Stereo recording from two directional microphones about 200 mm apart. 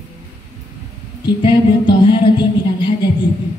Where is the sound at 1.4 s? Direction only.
25° left (ahead or behind).